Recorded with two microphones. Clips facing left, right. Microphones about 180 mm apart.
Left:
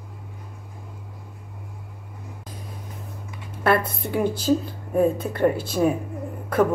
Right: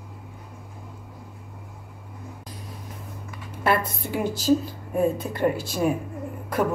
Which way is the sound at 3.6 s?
55° left (ahead or behind).